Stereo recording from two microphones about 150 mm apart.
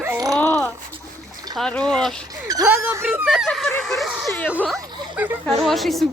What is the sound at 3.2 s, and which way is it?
Speech, centre (ahead or behind).